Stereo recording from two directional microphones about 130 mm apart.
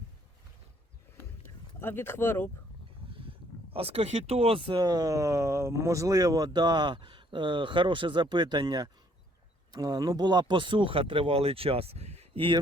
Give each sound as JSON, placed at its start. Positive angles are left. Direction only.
{"t": 1.5, "sound": "speech", "side_deg": 15}
{"t": 3.1, "sound": "speech", "side_deg": -45}